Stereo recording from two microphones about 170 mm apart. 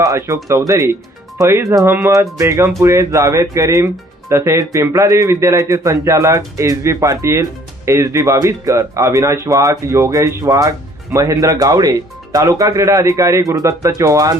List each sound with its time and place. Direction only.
0.0 s speech: 20° right (ahead or behind)
1.4 s a man's voice: 15° right (ahead or behind)